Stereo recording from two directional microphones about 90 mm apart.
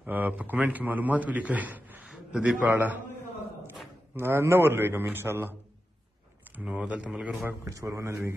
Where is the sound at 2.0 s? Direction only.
5° right (ahead or behind).